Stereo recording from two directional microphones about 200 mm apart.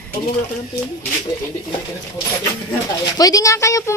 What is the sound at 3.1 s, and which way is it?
Speech, 15° left (ahead or behind).